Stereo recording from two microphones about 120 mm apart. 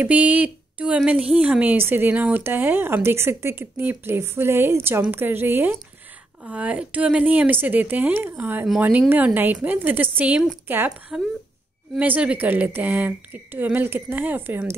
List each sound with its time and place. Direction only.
0.0 s a woman's voice: 10° right (ahead or behind)